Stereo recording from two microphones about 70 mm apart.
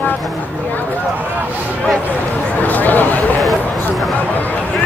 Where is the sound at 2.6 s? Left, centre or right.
Left.